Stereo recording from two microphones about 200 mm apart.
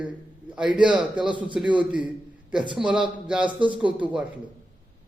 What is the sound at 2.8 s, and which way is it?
A man's voice, 5° right (ahead or behind).